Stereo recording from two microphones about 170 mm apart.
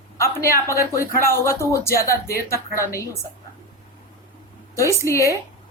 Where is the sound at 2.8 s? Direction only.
15° left (ahead or behind).